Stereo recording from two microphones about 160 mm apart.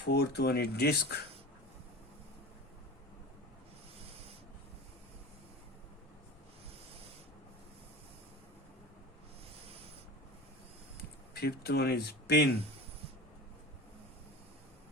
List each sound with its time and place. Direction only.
0.0 s speech: 90° left
10.9 s speech: 80° left